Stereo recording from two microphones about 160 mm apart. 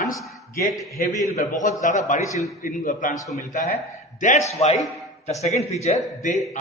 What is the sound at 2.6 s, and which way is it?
A man's voice, 65° left (ahead or behind).